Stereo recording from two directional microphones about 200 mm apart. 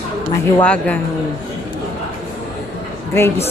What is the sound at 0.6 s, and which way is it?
Speech, 5° left (ahead or behind).